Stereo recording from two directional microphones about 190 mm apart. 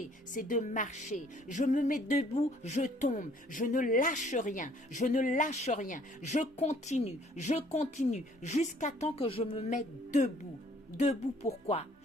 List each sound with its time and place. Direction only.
0.3 s a woman's voice: 45° left (ahead or behind)